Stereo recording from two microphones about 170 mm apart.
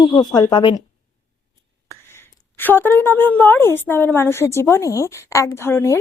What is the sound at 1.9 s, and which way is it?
A woman's voice, 15° left (ahead or behind).